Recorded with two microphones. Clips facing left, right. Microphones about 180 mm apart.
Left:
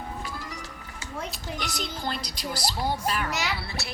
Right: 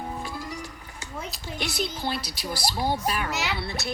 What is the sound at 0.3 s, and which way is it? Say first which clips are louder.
Music: right 3 dB; 15° right (ahead or behind).